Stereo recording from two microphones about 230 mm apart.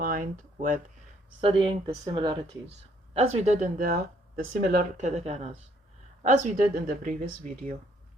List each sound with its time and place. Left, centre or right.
0.0 s speech: right
1.4 s speech: right